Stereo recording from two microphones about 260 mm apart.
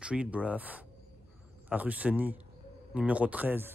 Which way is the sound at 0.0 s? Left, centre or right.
Centre.